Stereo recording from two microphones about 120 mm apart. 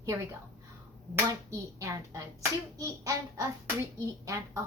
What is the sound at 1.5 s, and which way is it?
A woman's voice, 25° right (ahead or behind).